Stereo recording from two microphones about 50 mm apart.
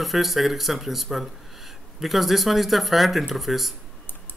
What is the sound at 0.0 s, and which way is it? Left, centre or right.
Speech, centre.